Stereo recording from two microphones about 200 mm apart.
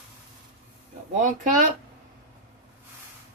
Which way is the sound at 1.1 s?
40° right (ahead or behind).